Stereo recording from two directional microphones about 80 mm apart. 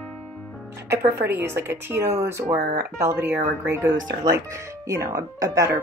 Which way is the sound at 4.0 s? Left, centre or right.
Right.